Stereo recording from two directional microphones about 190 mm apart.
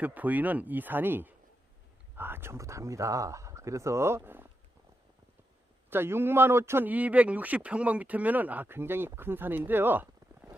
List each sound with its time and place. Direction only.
0.0 s speech: 10° right (ahead or behind)
5.9 s speech: 10° right (ahead or behind)